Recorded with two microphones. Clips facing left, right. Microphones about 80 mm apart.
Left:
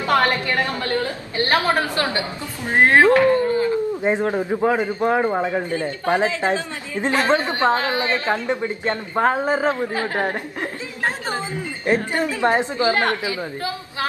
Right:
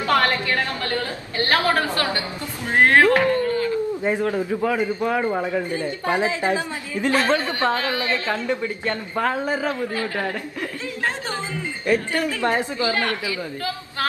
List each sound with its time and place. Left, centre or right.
0.0 s a woman's voice: left